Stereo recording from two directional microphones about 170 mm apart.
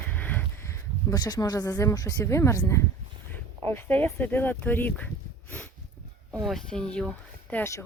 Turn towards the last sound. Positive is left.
turn(degrees=10)  # may be behind; listen again after turning